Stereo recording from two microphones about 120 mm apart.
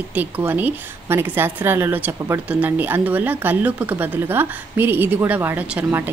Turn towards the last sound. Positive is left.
turn(degrees=-15)  # may be behind; listen again after turning